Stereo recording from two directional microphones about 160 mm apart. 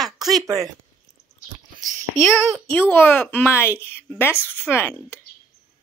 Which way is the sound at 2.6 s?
10° left (ahead or behind).